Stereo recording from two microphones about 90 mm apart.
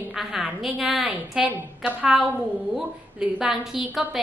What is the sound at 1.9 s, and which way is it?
A woman's voice, 15° right (ahead or behind).